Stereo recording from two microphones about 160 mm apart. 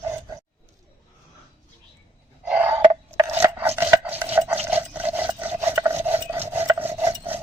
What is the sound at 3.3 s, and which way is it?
Chopping, 15° right (ahead or behind).